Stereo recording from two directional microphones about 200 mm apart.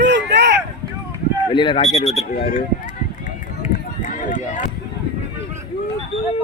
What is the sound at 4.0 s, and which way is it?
Run, 40° left (ahead or behind).